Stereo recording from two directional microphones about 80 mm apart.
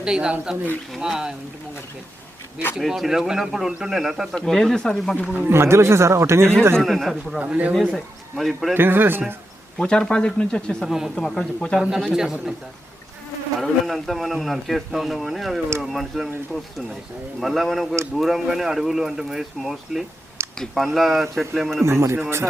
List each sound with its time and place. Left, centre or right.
0.0 s speech: centre
2.7 s a man's voice: centre
5.3 s a man's voice: right
6.7 s a man's voice: centre
7.3 s speech: centre
7.9 s a man's voice: centre
8.7 s speech: right
9.7 s speech: centre
10.8 s a man's voice: centre
11.8 s a man's voice: centre
13.6 s a man's voice: centre
17.4 s a man's voice: centre
21.8 s a man's voice: right